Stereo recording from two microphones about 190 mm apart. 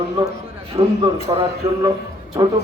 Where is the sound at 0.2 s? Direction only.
30° right (ahead or behind).